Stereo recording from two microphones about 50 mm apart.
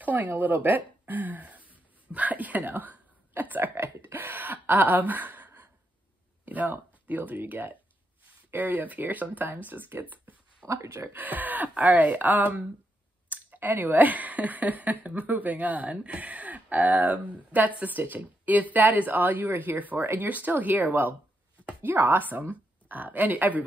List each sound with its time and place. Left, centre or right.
0.0 s a woman's voice: right
10.7 s speech: right
11.1 s speech: right